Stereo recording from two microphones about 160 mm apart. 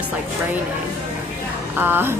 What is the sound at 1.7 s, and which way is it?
Speech, 15° right (ahead or behind).